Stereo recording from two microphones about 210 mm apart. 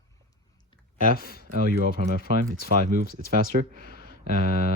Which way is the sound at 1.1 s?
45° left (ahead or behind).